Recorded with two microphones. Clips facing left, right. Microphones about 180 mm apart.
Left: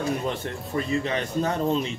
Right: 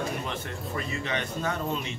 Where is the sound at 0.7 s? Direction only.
35° left (ahead or behind).